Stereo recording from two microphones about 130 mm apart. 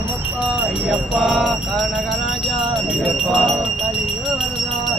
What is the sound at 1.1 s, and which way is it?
Jingle bell, centre (ahead or behind).